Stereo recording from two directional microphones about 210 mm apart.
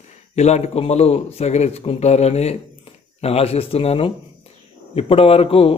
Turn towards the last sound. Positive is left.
turn(degrees=25)  # may be behind; listen again after turning